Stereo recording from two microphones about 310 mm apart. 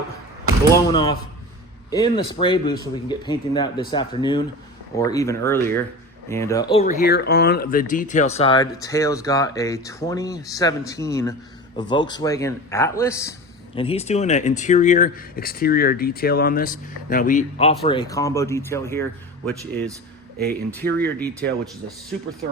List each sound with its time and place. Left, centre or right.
0.7 s speech: centre
20.7 s speech: centre